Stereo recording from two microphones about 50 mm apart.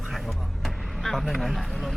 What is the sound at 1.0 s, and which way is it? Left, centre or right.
Speech, centre.